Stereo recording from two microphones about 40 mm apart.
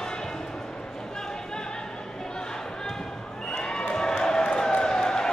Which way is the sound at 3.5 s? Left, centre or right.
Centre.